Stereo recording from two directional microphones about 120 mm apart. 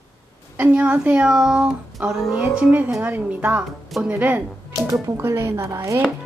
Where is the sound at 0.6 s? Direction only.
10° right (ahead or behind).